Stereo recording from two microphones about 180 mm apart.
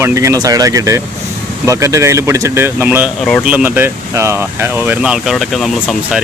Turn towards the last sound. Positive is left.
turn(degrees=0)  # may be behind; listen again after turning